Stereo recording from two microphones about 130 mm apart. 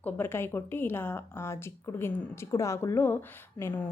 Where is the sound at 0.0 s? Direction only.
15° left (ahead or behind).